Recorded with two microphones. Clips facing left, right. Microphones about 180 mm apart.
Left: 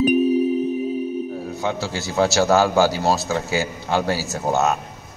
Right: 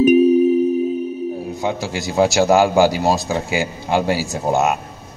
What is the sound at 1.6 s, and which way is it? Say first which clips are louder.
A man's voice: right 1 dB; 15° right (ahead or behind).